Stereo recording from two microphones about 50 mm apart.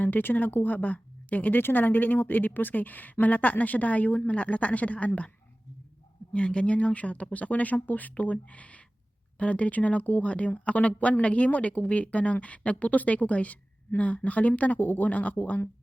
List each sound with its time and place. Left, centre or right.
0.0 s a woman's voice: left
6.3 s a woman's voice: left